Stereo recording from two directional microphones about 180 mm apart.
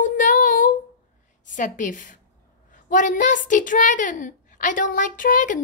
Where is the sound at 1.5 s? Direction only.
45° left (ahead or behind).